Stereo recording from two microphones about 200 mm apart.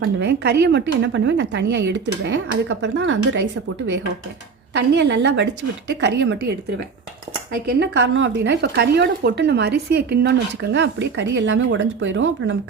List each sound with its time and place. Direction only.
0.0 s speech: 60° right (ahead or behind)
4.7 s speech: 60° right (ahead or behind)
7.5 s speech: 60° right (ahead or behind)